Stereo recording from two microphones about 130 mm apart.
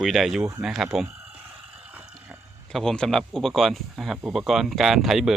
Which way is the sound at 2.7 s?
5° left (ahead or behind).